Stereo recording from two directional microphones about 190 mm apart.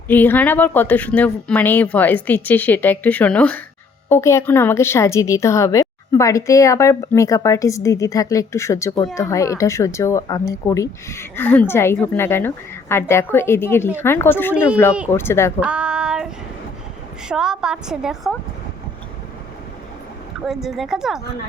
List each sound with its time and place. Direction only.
0.1 s speech: 10° left (ahead or behind)
15.6 s female singing: 5° right (ahead or behind)
17.2 s a woman's voice: 5° right (ahead or behind)
20.5 s a woman's voice: centre (ahead or behind)